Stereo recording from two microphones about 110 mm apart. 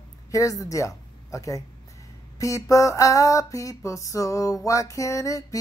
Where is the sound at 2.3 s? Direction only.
30° left (ahead or behind).